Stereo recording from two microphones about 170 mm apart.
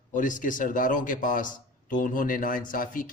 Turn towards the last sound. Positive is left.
turn(degrees=55)  # may be behind; listen again after turning